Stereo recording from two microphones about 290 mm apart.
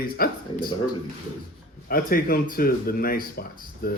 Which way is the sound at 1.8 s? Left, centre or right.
Left.